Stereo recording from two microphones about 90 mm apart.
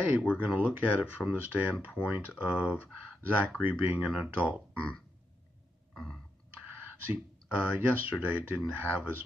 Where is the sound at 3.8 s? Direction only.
15° right (ahead or behind).